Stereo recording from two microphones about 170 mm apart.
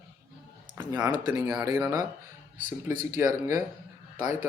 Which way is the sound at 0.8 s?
15° right (ahead or behind).